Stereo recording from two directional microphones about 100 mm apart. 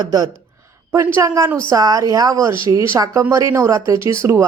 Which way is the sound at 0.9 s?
25° right (ahead or behind).